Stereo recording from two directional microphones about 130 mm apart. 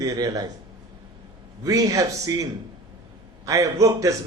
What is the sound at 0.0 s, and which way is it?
Speech, 30° right (ahead or behind).